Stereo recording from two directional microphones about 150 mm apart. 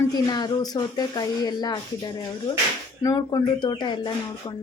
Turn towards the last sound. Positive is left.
turn(degrees=30)  # may be behind; listen again after turning